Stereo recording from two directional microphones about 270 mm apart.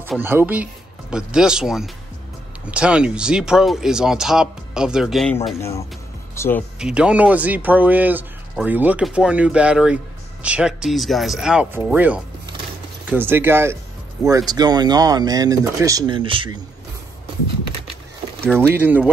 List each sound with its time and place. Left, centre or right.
0.0 s speech: centre
6.8 s speech: centre
18.8 s speech: centre